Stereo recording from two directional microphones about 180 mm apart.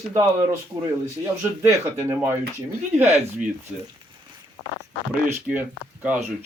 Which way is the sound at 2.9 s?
40° right (ahead or behind).